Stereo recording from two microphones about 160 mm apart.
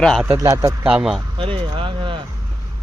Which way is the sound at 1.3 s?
35° right (ahead or behind).